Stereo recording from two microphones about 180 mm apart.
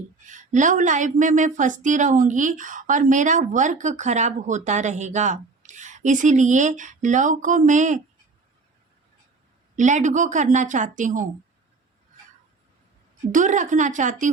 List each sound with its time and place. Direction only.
0.3 s speech: 45° right (ahead or behind)
9.7 s speech: 45° right (ahead or behind)
13.3 s speech: 45° right (ahead or behind)